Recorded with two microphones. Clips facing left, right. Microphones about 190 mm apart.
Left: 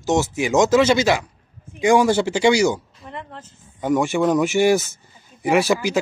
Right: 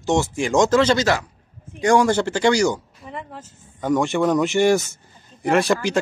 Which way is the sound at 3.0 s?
5° right (ahead or behind).